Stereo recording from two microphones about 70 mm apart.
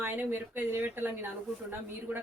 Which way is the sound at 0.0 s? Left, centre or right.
Right.